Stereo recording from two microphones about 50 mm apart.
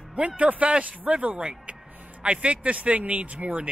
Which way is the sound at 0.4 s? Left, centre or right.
Right.